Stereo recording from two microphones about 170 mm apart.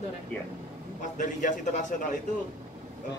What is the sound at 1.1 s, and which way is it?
Speech, 45° left (ahead or behind).